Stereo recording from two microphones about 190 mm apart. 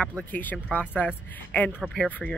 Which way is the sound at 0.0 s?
5° left (ahead or behind).